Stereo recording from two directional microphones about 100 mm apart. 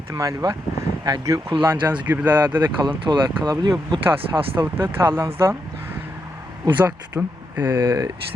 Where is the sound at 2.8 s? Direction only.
50° right (ahead or behind).